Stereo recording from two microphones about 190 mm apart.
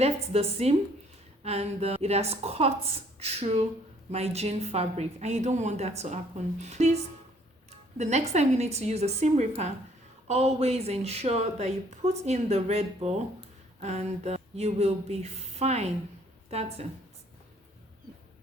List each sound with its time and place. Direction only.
0.0 s a woman's voice: 35° right (ahead or behind)